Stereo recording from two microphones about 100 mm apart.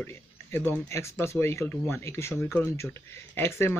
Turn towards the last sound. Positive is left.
turn(degrees=25)  # may be behind; listen again after turning